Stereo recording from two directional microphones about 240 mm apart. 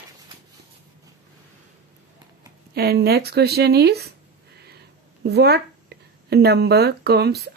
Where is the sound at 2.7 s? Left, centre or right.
Right.